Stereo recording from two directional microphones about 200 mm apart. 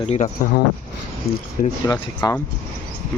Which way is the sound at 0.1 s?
35° left (ahead or behind).